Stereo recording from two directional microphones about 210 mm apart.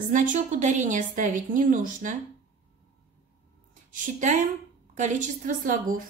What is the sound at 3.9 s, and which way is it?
A woman's voice, 35° right (ahead or behind).